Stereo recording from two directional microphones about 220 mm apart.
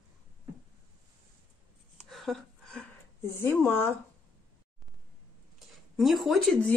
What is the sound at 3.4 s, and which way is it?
Speech, 10° left (ahead or behind).